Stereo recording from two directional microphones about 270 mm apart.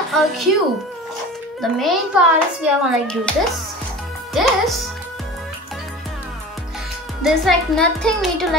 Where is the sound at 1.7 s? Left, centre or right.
Centre.